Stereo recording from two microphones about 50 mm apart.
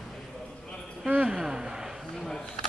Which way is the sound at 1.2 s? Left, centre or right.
Centre.